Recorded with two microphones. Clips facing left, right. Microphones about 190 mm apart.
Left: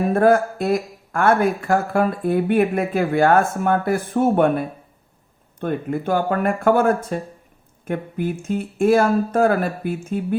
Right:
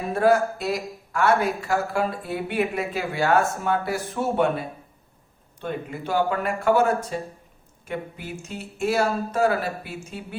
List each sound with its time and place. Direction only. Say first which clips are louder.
0.1 s speech: left 2 dB; 50° left (ahead or behind)